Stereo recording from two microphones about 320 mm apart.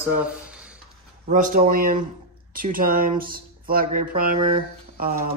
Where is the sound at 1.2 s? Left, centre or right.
Right.